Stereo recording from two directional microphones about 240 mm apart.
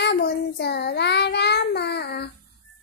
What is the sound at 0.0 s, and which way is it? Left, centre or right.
Child singing, left.